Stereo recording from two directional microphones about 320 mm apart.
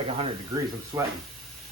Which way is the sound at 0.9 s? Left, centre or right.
Centre.